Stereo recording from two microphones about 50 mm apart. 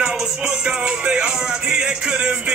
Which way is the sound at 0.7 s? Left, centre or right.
Centre.